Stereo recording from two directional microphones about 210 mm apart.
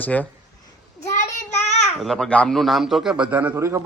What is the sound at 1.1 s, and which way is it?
Child singing, 35° left (ahead or behind).